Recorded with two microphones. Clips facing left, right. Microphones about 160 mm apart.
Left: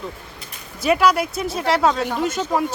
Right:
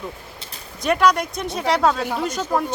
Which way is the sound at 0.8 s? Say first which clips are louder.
Left 1 dB; 5° left (ahead or behind).